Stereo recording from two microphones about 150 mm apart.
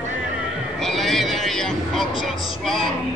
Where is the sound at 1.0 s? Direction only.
Centre (ahead or behind).